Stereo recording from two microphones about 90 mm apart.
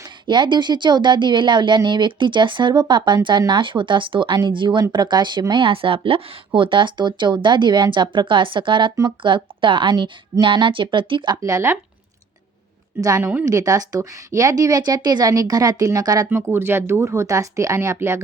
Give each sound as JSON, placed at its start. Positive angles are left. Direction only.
{"t": 0.3, "sound": "a woman's voice", "side_deg": -60}
{"t": 11.4, "sound": "a woman's voice", "side_deg": -30}
{"t": 13.0, "sound": "a woman's voice", "side_deg": -35}
{"t": 16.3, "sound": "speech", "side_deg": -25}